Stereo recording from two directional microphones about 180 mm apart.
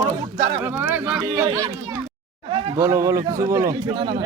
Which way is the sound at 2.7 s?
15° right (ahead or behind).